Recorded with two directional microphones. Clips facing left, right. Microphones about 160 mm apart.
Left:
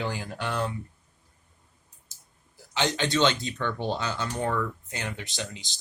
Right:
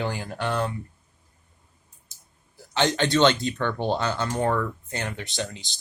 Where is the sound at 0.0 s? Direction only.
50° right (ahead or behind).